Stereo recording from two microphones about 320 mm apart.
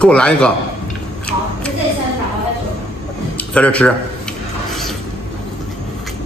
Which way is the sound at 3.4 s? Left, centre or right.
Centre.